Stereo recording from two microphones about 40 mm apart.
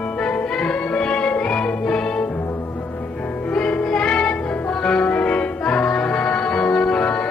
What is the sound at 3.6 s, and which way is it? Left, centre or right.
Music, left.